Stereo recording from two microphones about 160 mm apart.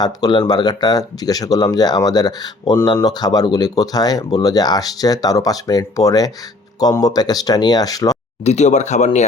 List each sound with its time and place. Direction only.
0.0 s speech: 25° left (ahead or behind)
8.4 s speech: 45° left (ahead or behind)